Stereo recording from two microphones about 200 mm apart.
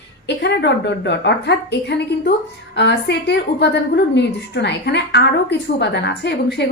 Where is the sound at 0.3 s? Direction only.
60° left (ahead or behind).